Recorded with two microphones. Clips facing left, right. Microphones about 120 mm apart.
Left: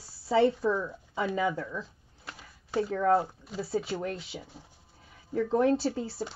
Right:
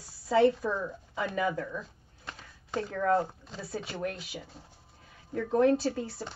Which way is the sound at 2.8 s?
30° left (ahead or behind).